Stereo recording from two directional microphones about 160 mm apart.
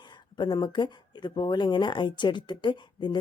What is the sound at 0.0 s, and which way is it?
Speech, 25° left (ahead or behind).